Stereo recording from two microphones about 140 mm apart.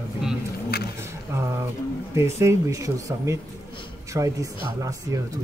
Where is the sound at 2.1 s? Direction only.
20° right (ahead or behind).